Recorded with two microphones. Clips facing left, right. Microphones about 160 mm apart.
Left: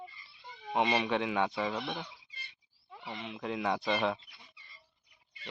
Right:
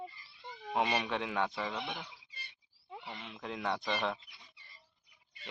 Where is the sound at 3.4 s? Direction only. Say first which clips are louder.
Left 4 dB; 5° left (ahead or behind).